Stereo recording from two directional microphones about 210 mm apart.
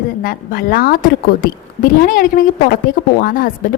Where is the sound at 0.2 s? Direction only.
45° left (ahead or behind).